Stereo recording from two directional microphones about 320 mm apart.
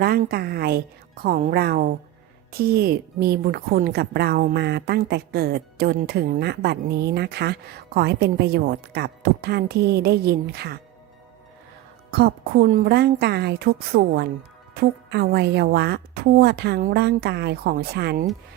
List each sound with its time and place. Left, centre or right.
0.0 s a woman's voice: right
12.1 s a woman's voice: right